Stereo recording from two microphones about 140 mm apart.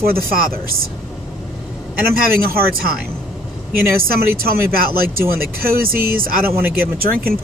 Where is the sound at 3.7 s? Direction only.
90° right.